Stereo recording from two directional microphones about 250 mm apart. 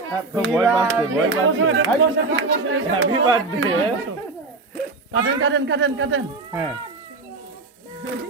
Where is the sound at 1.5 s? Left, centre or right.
Right.